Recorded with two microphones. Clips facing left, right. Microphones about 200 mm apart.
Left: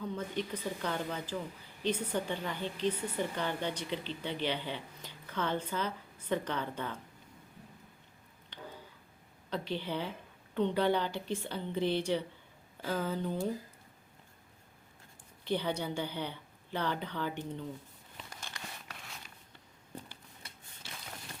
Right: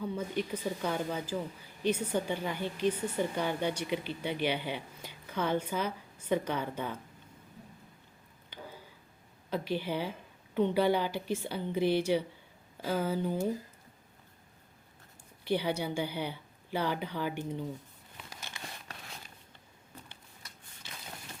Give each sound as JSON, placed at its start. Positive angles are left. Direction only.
{"t": 0.0, "sound": "speech", "side_deg": -10}
{"t": 9.5, "sound": "speech", "side_deg": -10}
{"t": 15.4, "sound": "speech", "side_deg": -10}
{"t": 18.5, "sound": "a sound", "side_deg": -20}